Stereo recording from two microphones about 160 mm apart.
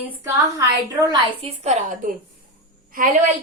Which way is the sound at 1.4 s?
40° right (ahead or behind).